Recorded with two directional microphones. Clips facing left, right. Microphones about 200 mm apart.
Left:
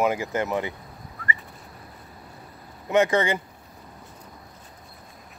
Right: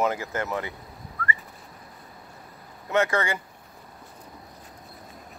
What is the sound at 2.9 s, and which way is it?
Speech, 20° left (ahead or behind).